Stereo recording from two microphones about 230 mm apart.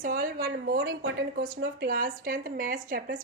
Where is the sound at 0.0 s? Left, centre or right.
Right.